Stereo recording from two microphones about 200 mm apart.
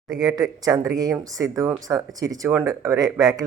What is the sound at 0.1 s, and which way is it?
Speech, 20° right (ahead or behind).